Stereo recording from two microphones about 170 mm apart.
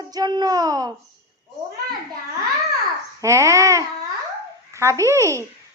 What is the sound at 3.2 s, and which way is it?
A woman's voice, 20° right (ahead or behind).